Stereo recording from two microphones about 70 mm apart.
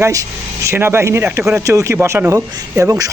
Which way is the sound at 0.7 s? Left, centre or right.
Right.